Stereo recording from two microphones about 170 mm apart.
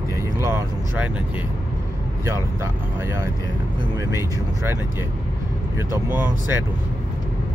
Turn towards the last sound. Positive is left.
turn(degrees=-15)  # may be behind; listen again after turning